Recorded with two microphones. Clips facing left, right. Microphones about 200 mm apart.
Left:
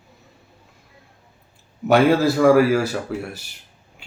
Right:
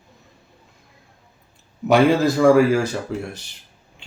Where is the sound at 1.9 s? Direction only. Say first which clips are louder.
Even; 5° left (ahead or behind).